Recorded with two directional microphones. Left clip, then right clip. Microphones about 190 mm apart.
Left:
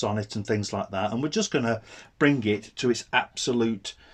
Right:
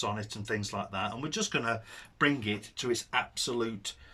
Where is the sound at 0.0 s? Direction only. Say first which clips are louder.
Left 6 dB; 35° left (ahead or behind).